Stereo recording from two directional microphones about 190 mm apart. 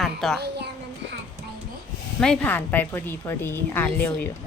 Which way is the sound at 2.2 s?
5° left (ahead or behind).